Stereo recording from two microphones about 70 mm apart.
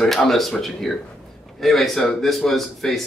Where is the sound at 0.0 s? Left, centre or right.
Centre.